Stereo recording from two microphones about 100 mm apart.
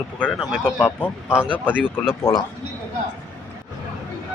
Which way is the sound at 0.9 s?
25° left (ahead or behind).